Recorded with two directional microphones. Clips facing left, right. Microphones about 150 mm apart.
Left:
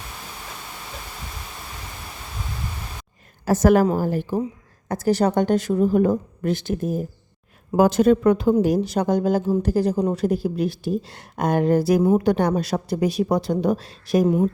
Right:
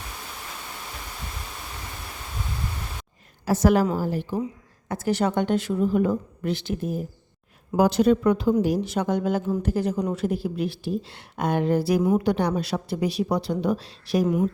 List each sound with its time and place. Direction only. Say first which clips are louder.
3.4 s a woman's voice: left 3 dB; 45° left (ahead or behind)
4.9 s a woman's voice: left 4 dB; 40° left (ahead or behind)